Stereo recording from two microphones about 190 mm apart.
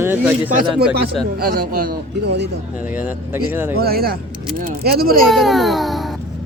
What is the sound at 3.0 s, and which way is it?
Speech, 10° right (ahead or behind).